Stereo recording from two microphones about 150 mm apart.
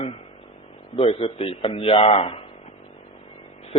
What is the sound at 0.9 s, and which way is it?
A man's voice, 40° left (ahead or behind).